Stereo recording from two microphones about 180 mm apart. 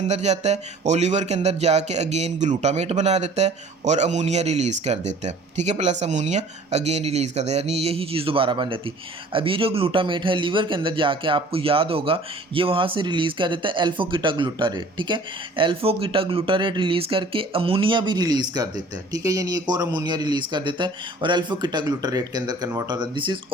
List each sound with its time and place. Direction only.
0.1 s a man's voice: 40° right (ahead or behind)